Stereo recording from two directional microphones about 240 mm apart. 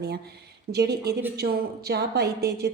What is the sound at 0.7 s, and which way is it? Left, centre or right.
A woman's voice, right.